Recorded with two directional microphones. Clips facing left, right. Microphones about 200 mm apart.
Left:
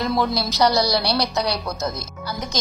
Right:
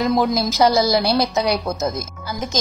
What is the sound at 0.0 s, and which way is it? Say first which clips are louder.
A woman's voice: right 4 dB; 20° right (ahead or behind).